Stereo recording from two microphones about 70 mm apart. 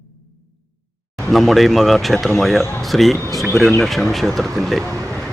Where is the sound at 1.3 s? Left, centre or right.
Centre.